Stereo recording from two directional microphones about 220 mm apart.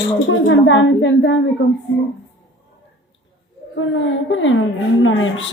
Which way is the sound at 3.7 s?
60° left (ahead or behind).